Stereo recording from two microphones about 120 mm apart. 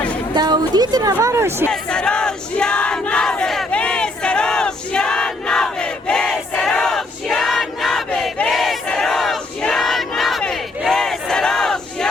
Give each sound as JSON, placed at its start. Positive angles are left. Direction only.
{"t": 0.3, "sound": "a woman's voice", "side_deg": -35}
{"t": 1.7, "sound": "battle cry", "side_deg": 5}